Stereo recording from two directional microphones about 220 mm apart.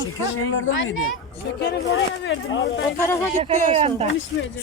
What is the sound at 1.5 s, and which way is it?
Speech, 50° left (ahead or behind).